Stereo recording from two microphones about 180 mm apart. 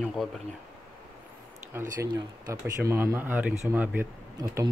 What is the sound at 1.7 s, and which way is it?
Speech, 10° right (ahead or behind).